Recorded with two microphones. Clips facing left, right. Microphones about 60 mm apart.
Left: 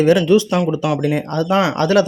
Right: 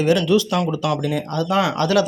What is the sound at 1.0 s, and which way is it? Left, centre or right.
Speech, left.